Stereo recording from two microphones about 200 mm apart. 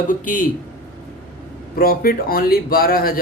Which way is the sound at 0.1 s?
40° left (ahead or behind).